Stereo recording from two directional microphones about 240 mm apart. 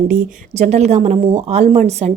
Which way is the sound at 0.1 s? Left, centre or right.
Right.